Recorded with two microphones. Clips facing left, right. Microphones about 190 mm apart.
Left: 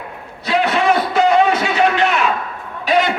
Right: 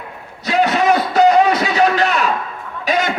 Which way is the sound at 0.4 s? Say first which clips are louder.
Right 1 dB; 40° right (ahead or behind).